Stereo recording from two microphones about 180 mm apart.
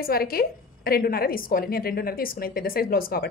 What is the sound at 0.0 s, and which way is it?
A woman's voice, 55° left (ahead or behind).